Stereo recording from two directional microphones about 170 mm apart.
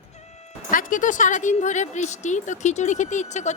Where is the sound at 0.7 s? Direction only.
50° left (ahead or behind).